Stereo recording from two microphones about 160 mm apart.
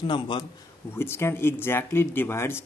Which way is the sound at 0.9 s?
15° left (ahead or behind).